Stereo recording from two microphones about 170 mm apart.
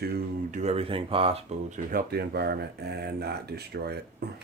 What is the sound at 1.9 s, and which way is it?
Speech, 60° right (ahead or behind).